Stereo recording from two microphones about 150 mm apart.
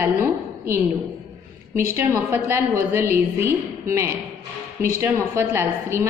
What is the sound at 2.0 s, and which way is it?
A woman's voice, 15° right (ahead or behind).